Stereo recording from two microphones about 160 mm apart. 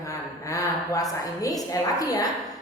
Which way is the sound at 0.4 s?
20° left (ahead or behind).